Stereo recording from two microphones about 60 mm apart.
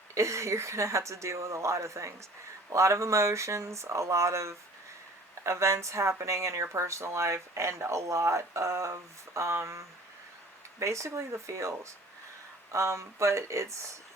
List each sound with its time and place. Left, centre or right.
0.1 s speech: right